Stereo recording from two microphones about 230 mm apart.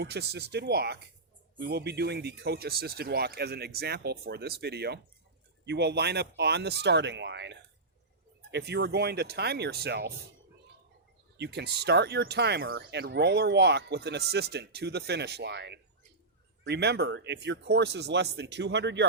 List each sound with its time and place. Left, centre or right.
0.0 s speech: right
11.3 s speech: right